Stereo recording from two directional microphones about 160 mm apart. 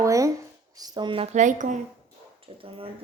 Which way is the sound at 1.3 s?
50° right (ahead or behind).